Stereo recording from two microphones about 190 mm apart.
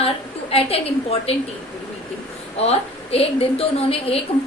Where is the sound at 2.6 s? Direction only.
30° left (ahead or behind).